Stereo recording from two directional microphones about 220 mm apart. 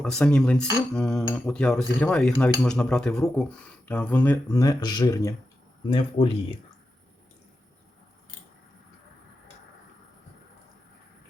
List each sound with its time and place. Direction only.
0.0 s cutlery: 5° left (ahead or behind)
3.8 s speech: 5° left (ahead or behind); by 6.3 s 25° left (ahead or behind)